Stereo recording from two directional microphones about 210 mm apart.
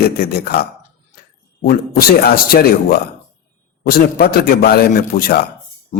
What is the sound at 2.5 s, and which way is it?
A man's voice, 45° left (ahead or behind).